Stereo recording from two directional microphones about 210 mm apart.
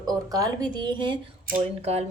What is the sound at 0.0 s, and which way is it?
A woman's voice, 20° right (ahead or behind).